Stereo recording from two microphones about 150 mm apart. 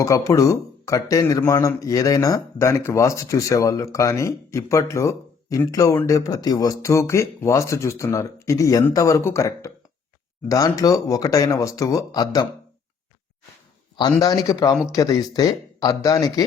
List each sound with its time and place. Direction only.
0.0 s speech: 20° left (ahead or behind)
13.9 s speech: 25° left (ahead or behind)